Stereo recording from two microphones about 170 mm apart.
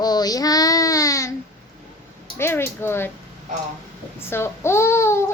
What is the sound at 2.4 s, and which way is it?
Speech, 15° left (ahead or behind).